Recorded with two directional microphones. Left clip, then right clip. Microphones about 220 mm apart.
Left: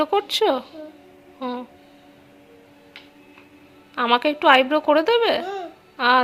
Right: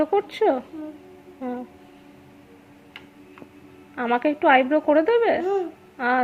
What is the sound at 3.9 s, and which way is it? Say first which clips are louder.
Speech: left 3 dB; 15° left (ahead or behind).